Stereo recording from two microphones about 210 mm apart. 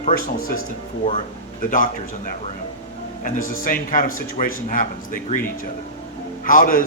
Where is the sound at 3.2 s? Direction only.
40° left (ahead or behind).